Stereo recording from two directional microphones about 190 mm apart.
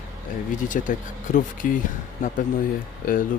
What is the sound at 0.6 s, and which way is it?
Speech, 45° left (ahead or behind).